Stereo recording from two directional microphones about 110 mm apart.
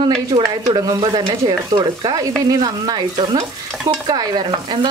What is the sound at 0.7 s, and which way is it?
Stir, 35° right (ahead or behind).